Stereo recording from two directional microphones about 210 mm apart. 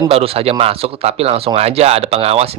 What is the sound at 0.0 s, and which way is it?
Speech, 25° right (ahead or behind).